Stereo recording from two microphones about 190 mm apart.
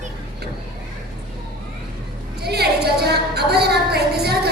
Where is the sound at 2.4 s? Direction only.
60° right (ahead or behind).